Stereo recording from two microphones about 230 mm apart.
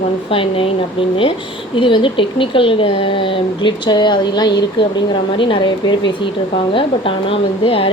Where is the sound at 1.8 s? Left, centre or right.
Left.